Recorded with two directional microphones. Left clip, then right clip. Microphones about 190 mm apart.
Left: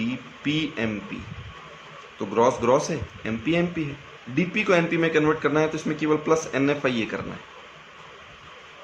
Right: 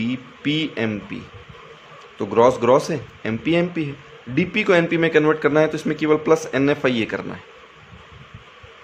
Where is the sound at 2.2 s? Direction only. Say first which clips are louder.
Right 5 dB; 45° right (ahead or behind).